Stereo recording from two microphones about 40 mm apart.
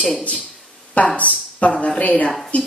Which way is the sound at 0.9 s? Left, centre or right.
Left.